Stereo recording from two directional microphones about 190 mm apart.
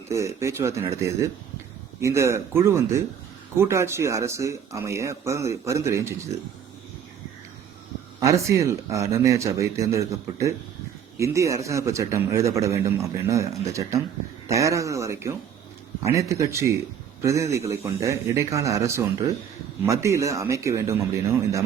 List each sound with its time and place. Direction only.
0.1 s a man's voice: 15° right (ahead or behind)
8.2 s a man's voice: 15° right (ahead or behind)